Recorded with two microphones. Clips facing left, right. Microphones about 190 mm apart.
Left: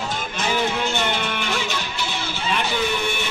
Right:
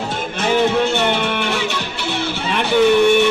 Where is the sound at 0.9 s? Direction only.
60° right (ahead or behind).